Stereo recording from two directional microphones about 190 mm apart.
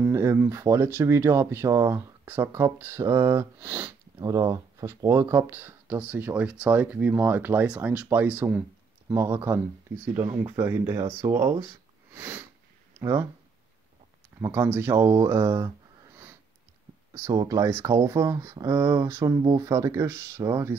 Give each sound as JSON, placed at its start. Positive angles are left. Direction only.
{"t": 0.0, "sound": "speech", "side_deg": -10}
{"t": 4.3, "sound": "speech", "side_deg": -20}
{"t": 11.6, "sound": "sniff", "side_deg": -10}
{"t": 13.0, "sound": "speech", "side_deg": -15}
{"t": 14.4, "sound": "speech", "side_deg": -15}
{"t": 17.1, "sound": "speech", "side_deg": -20}